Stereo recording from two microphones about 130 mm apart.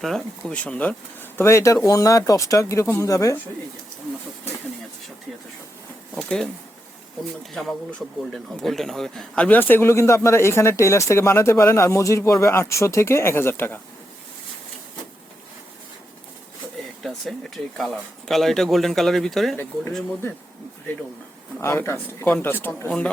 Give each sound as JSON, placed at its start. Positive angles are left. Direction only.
{"t": 0.0, "sound": "speech", "side_deg": 5}
{"t": 6.1, "sound": "speech", "side_deg": 5}
{"t": 7.5, "sound": "speech", "side_deg": 0}
{"t": 17.0, "sound": "speech", "side_deg": 0}
{"t": 21.6, "sound": "speech", "side_deg": 20}